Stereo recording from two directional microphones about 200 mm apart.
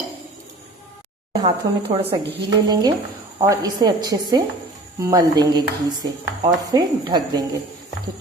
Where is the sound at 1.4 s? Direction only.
30° right (ahead or behind).